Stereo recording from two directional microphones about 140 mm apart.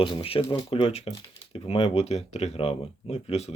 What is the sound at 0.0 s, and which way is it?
Speech, 40° left (ahead or behind).